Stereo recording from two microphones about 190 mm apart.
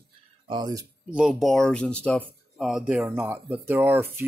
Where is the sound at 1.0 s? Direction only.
5° right (ahead or behind).